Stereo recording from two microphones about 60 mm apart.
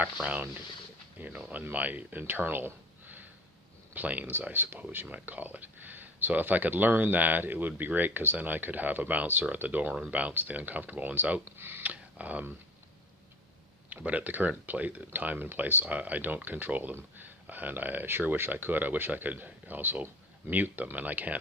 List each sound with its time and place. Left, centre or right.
0.2 s speech: right
11.8 s a sound: right
13.9 s speech: right